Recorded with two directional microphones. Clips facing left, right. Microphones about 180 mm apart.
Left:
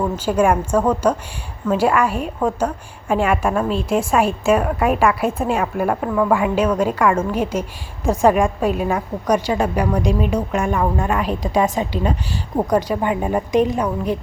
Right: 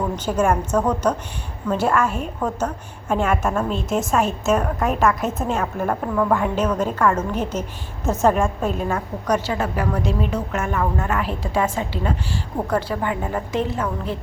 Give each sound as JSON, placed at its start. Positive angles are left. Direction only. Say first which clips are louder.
{"t": 0.3, "sound": "a woman's voice", "louder": "left 3 dB", "side_deg": 10}